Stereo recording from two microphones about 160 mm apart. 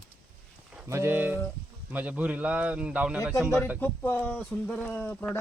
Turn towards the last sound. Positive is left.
turn(degrees=15)  # may be behind; listen again after turning